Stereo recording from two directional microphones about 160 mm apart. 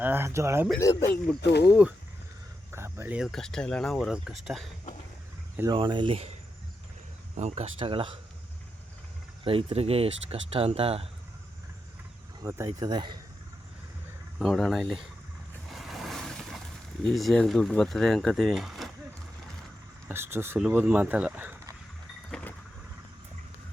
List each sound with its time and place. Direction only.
0.0 s speech: 15° right (ahead or behind)
1.4 s speech: 90° left
2.7 s a sound: 15° right (ahead or behind)
3.2 s speech: 5° left (ahead or behind)
5.7 s speech: 30° right (ahead or behind)
7.3 s speech: 45° right (ahead or behind)
9.4 s speech: 35° right (ahead or behind)
12.4 s speech: 20° right (ahead or behind)
14.3 s speech: centre (ahead or behind)
15.7 s boat: centre (ahead or behind)
17.0 s speech: centre (ahead or behind)
20.1 s speech: 15° right (ahead or behind)
22.3 s vehicle: 10° left (ahead or behind)